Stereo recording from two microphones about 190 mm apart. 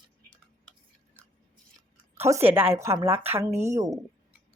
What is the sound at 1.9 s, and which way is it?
Speech, 10° right (ahead or behind).